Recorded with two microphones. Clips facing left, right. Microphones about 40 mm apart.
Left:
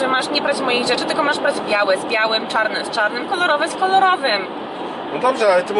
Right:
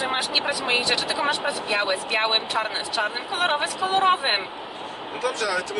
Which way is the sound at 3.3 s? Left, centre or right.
Centre.